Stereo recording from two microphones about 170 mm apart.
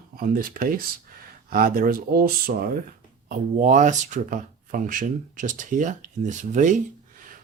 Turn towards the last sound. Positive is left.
turn(degrees=-45)  # may be behind; listen again after turning